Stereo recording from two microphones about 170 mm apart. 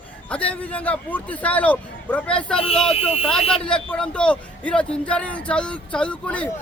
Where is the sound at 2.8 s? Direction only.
35° left (ahead or behind).